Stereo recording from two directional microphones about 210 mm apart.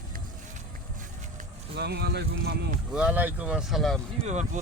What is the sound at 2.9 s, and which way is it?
Speech, 5° right (ahead or behind).